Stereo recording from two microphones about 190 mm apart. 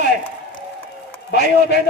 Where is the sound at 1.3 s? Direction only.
60° left (ahead or behind).